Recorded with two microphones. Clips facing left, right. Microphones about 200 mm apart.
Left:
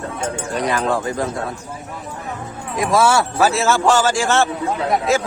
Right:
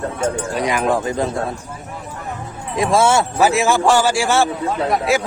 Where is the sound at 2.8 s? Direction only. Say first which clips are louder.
Right 1 dB; 25° right (ahead or behind).